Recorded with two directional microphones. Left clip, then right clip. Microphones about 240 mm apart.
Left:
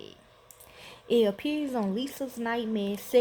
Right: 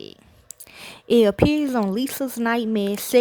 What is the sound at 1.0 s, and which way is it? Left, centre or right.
Speech, right.